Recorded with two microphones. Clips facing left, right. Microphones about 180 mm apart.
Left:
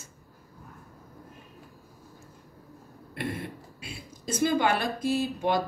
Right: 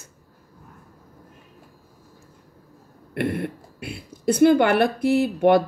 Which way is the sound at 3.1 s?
60° right (ahead or behind).